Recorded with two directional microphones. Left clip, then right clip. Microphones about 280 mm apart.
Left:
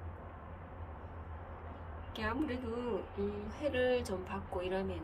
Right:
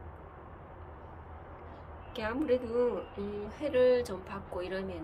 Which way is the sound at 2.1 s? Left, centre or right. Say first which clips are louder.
Right 7 dB; centre.